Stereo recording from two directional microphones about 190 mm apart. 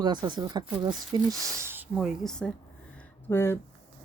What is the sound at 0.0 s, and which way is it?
Speech, 25° right (ahead or behind).